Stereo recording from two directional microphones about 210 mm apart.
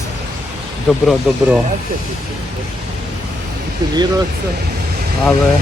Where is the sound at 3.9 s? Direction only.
20° right (ahead or behind).